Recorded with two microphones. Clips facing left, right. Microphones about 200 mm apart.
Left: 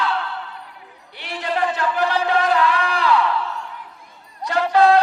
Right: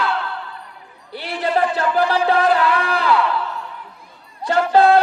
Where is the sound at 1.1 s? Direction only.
35° right (ahead or behind).